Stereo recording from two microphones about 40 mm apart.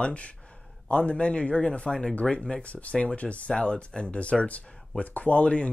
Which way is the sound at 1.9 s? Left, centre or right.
Centre.